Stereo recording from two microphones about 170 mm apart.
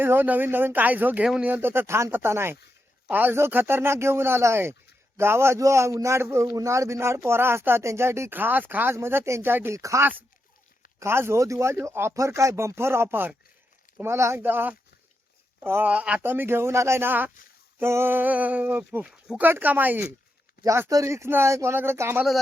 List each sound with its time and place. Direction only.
0.0 s a man's voice: 15° right (ahead or behind)